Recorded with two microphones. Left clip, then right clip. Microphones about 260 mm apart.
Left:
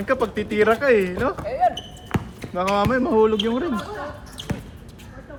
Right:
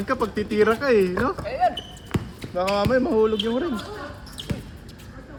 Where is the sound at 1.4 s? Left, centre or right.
Centre.